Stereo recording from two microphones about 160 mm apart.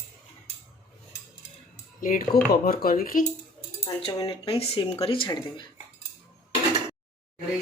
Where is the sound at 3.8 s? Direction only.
25° left (ahead or behind).